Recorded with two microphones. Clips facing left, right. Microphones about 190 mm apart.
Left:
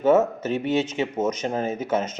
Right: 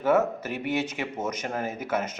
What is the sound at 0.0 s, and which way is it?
A man's voice, 20° left (ahead or behind).